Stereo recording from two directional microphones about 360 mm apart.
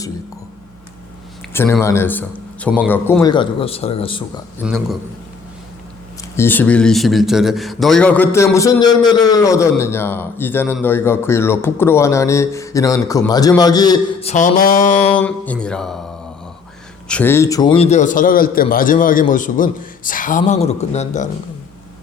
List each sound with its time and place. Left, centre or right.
1.5 s a man's voice: centre
4.6 s a man's voice: centre
6.3 s a man's voice: centre
15.0 s speech: centre
17.1 s a man's voice: centre